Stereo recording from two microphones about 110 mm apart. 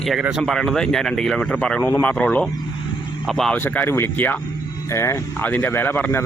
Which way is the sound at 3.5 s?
15° left (ahead or behind).